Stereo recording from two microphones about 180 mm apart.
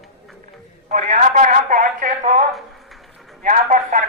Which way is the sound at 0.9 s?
40° right (ahead or behind).